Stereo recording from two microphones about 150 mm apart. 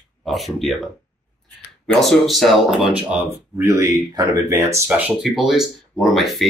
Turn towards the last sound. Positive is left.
turn(degrees=0)  # may be behind; listen again after turning